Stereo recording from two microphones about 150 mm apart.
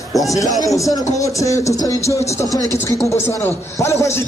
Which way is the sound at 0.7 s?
20° left (ahead or behind).